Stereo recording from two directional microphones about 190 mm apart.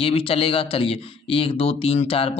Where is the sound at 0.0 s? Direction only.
30° left (ahead or behind).